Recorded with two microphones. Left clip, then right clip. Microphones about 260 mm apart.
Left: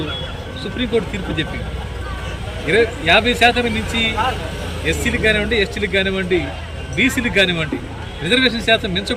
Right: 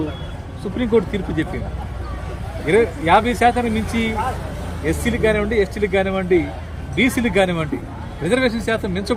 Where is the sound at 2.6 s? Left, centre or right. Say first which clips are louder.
Left 1 dB; centre.